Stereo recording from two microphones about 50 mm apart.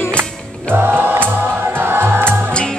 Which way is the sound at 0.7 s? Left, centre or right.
Right.